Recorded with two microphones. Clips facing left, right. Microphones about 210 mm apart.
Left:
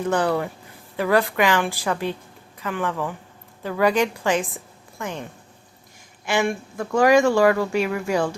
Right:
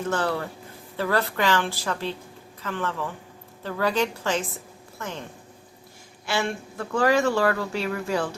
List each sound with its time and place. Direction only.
0.1 s speech: 15° left (ahead or behind)
6.2 s speech: 15° left (ahead or behind)